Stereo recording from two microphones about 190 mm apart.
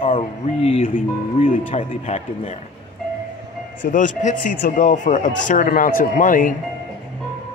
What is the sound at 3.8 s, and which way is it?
Speech, 40° left (ahead or behind).